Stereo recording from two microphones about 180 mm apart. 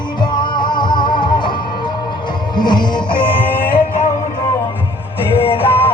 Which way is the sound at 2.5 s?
25° left (ahead or behind).